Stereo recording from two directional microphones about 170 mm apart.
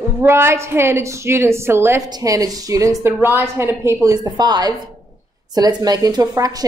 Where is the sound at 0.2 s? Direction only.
15° right (ahead or behind).